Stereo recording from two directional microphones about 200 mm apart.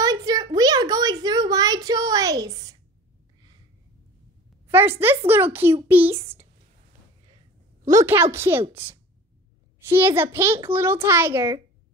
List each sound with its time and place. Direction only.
0.0 s a sound: 20° right (ahead or behind)
4.6 s a child's voice: 10° right (ahead or behind)
7.9 s a child's voice: 15° right (ahead or behind)